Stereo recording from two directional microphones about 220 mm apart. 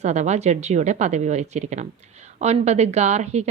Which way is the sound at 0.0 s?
30° right (ahead or behind).